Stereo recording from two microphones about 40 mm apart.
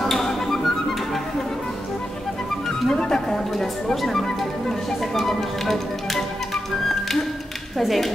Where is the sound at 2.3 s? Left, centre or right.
Centre.